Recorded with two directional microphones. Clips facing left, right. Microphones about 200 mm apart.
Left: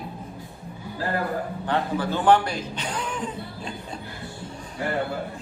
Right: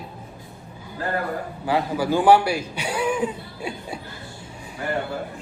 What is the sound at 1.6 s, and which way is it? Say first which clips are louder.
A man's voice: right 4 dB; 10° right (ahead or behind).